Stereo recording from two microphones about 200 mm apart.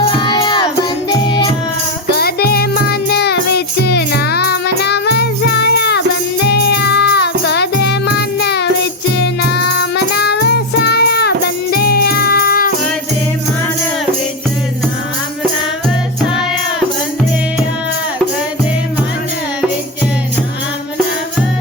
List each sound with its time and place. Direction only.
0.2 s music: 25° left (ahead or behind)
2.1 s music: 50° left (ahead or behind)
10.2 s music: 55° left (ahead or behind)